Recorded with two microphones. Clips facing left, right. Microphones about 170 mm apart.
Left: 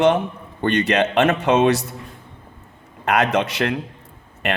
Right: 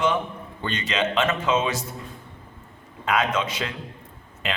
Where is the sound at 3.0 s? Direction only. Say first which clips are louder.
Left 5 dB; 70° left (ahead or behind).